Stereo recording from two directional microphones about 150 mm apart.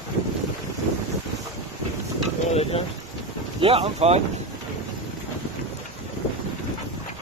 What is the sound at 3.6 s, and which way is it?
Speech, 40° right (ahead or behind).